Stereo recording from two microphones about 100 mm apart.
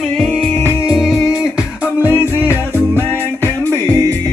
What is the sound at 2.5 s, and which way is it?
Music, 25° left (ahead or behind).